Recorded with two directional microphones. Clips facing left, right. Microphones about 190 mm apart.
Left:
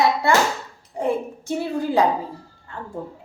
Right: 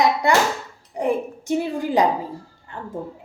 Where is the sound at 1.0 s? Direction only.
15° right (ahead or behind).